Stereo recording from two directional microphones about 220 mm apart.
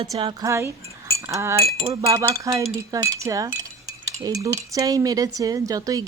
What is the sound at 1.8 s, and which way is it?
Speech, 25° right (ahead or behind).